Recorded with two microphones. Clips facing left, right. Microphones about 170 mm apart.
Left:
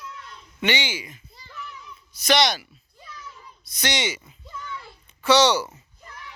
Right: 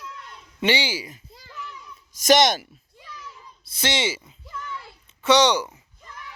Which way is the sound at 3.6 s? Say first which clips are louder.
Right 2 dB; 25° right (ahead or behind).